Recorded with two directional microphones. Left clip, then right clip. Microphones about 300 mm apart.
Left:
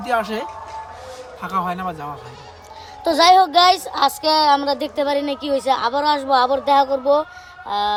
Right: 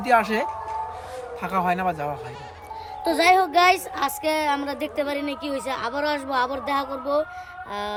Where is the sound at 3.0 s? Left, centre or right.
Centre.